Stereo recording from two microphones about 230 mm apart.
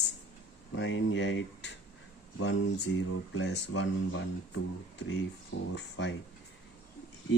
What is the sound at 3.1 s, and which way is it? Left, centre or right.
Speech, left.